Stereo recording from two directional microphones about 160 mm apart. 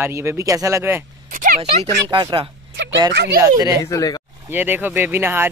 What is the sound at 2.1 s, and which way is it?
Speech, 30° right (ahead or behind).